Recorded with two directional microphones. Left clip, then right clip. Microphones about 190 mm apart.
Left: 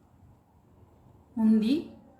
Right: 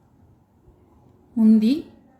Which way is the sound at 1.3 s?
45° right (ahead or behind).